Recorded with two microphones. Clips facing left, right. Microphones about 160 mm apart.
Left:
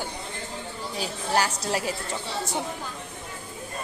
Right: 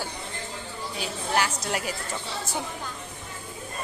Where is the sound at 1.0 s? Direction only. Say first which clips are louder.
Left 1 dB; 35° left (ahead or behind).